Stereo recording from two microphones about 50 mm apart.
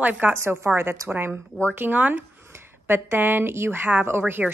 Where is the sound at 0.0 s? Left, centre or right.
Right.